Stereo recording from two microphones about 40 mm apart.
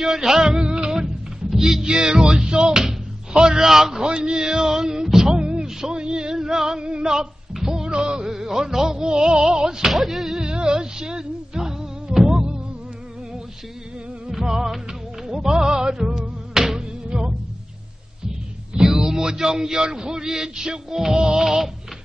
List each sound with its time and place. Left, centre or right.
0.0 s music: centre
3.6 s speech: centre
4.0 s speech: right
5.1 s a sound: centre
6.8 s speech: right
7.5 s music: centre
9.9 s music: centre
10.5 s music: right
14.3 s music: centre
18.8 s speech: centre